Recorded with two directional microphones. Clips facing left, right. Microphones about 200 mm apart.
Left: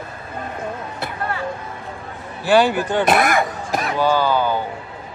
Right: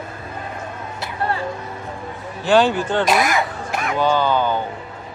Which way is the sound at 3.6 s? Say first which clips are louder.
Left 1 dB; 35° left (ahead or behind).